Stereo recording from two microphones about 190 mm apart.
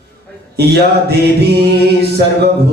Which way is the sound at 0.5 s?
60° right (ahead or behind).